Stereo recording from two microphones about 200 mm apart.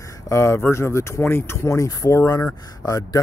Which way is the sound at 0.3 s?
15° left (ahead or behind).